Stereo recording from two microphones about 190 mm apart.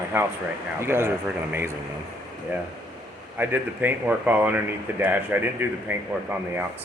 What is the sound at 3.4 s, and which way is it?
Speech, 10° right (ahead or behind).